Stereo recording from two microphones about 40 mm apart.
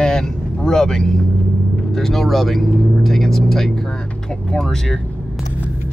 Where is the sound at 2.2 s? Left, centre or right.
Centre.